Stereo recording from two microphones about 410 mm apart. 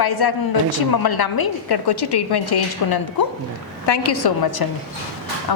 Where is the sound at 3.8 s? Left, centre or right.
Left.